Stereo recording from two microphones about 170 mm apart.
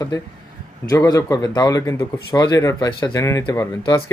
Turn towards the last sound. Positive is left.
turn(degrees=20)  # may be behind; listen again after turning